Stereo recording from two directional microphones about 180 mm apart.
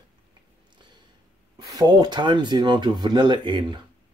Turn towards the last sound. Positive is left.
turn(degrees=-25)  # may be behind; listen again after turning